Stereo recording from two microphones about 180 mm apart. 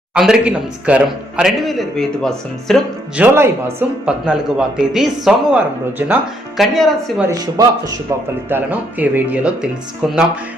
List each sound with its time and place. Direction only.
0.1 s a man's voice: 5° right (ahead or behind)
3.3 s a man's voice: 15° right (ahead or behind)
6.6 s a man's voice: centre (ahead or behind)
7.3 s a man's voice: 20° right (ahead or behind)